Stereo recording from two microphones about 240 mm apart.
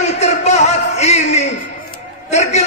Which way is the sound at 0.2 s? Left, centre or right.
Left.